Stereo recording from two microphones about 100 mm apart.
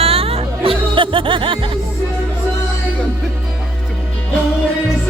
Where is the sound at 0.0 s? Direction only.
75° right (ahead or behind).